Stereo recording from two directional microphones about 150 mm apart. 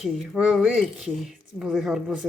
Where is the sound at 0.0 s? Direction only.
Centre (ahead or behind).